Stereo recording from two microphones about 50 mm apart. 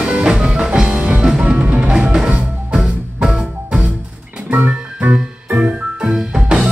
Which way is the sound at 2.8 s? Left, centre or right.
Centre.